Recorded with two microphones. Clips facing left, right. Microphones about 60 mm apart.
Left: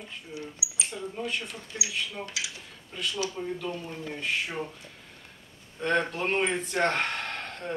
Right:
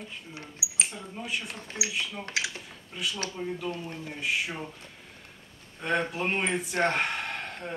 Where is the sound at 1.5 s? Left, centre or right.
Right.